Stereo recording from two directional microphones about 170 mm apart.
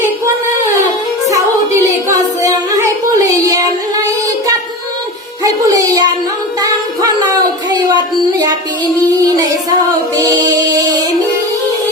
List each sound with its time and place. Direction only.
2.0 s child singing: 20° right (ahead or behind)
5.4 s music: 20° right (ahead or behind)
7.7 s a sound: 25° right (ahead or behind)
9.0 s child singing: 20° right (ahead or behind)
10.2 s music: 25° right (ahead or behind)